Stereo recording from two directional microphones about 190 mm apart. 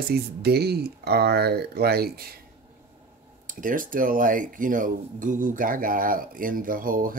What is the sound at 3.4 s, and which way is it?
Speech, 45° right (ahead or behind).